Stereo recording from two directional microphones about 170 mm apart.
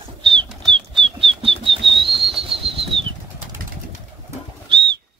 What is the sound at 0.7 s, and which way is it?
Bird flight, 30° right (ahead or behind).